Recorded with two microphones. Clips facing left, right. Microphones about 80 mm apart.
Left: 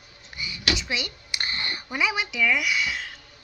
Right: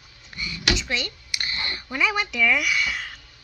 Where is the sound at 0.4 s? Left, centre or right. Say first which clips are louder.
Right 2 dB; centre.